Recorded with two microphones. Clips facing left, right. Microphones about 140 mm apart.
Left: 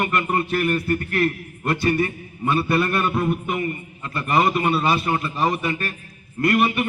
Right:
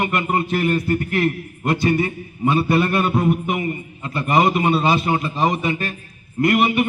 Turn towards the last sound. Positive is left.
turn(degrees=-20)  # may be behind; listen again after turning